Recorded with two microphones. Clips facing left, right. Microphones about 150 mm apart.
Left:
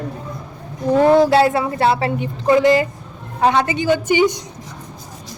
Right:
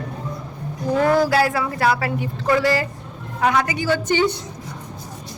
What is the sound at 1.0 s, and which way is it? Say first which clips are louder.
A woman's voice: left 5 dB; 25° left (ahead or behind).